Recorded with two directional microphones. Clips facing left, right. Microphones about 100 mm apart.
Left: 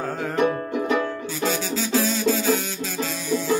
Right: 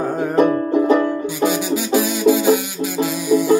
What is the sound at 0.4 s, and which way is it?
Music, 35° right (ahead or behind).